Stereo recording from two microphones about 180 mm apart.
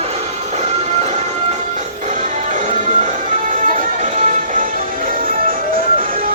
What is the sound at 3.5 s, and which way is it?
Music, 40° right (ahead or behind).